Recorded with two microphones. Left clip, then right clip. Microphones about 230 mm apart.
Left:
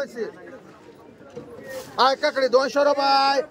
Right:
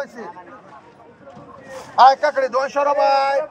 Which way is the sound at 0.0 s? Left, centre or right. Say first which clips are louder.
Left 1 dB; centre.